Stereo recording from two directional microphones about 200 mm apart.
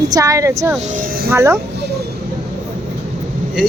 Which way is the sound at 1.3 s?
15° right (ahead or behind).